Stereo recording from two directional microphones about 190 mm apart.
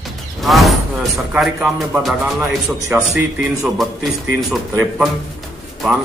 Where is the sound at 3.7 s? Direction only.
Centre (ahead or behind).